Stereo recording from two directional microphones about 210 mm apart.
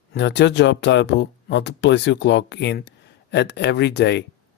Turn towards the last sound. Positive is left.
turn(degrees=55)  # may be behind; listen again after turning